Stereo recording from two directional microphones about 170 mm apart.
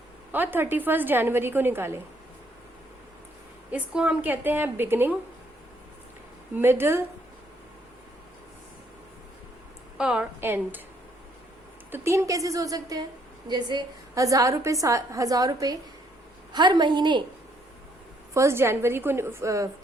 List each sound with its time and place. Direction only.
0.3 s a woman's voice: 10° right (ahead or behind)
3.7 s a woman's voice: 10° right (ahead or behind)
6.5 s a woman's voice: 15° right (ahead or behind)
10.0 s a woman's voice: 5° right (ahead or behind)
11.9 s a woman's voice: 15° right (ahead or behind)
18.3 s a woman's voice: 15° right (ahead or behind)